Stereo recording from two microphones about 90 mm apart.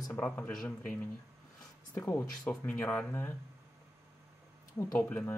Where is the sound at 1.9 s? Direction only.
30° left (ahead or behind).